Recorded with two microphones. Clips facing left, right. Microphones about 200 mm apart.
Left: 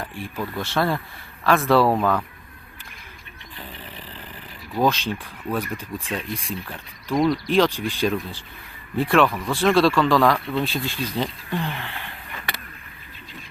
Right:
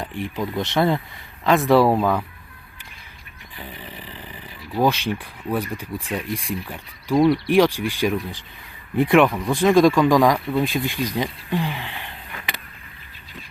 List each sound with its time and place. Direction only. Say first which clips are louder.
0.0 s speech: right 3 dB; 15° right (ahead or behind)
3.6 s a sound: right 2 dB; 15° right (ahead or behind)
5.2 s speech: right 2 dB; 10° right (ahead or behind)